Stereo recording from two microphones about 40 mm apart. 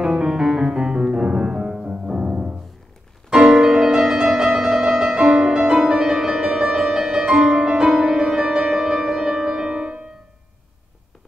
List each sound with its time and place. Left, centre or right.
0.0 s music: centre